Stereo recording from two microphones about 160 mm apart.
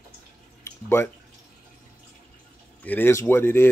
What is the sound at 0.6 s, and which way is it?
Drip, 15° left (ahead or behind).